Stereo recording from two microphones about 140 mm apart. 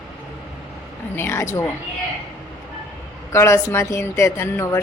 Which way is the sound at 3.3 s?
20° left (ahead or behind).